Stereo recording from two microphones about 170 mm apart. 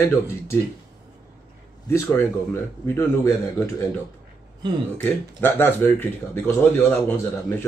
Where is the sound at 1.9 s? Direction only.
15° left (ahead or behind).